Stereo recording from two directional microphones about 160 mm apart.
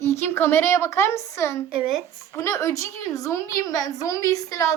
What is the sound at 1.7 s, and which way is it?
Speech, 5° right (ahead or behind).